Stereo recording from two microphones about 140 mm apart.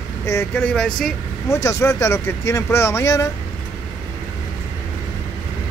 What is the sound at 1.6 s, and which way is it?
Speech, 20° left (ahead or behind).